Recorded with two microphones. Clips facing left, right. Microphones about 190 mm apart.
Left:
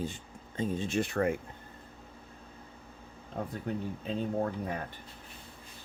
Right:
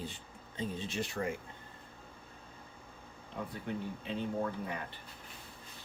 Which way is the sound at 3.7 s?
40° left (ahead or behind).